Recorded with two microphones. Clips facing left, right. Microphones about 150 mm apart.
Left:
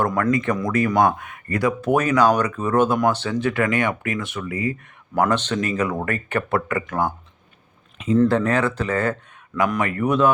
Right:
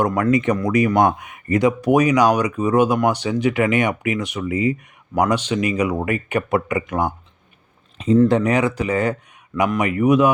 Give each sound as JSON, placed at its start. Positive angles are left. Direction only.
{"t": 0.2, "sound": "speech", "side_deg": -20}
{"t": 7.9, "sound": "speech", "side_deg": -35}
{"t": 8.3, "sound": "speech", "side_deg": -15}